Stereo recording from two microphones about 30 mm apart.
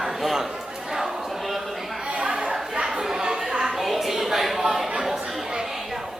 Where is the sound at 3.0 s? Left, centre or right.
Centre.